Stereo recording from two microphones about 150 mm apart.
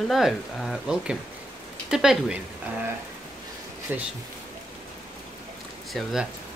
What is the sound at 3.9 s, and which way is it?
Speech, 10° right (ahead or behind).